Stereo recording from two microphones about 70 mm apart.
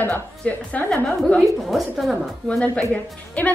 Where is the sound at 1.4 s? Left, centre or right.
Centre.